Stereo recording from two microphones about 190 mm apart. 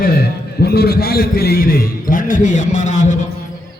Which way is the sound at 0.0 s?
55° left (ahead or behind).